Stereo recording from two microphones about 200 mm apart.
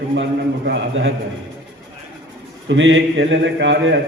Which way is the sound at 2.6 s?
70° right (ahead or behind).